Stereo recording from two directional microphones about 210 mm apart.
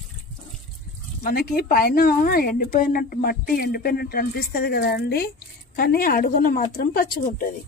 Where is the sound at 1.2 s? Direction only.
45° left (ahead or behind).